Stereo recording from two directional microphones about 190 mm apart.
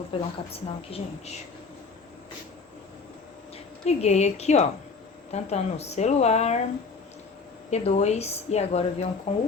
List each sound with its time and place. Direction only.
0.1 s a woman's voice: 30° left (ahead or behind)
3.8 s a woman's voice: 35° left (ahead or behind)
7.7 s a woman's voice: 35° left (ahead or behind)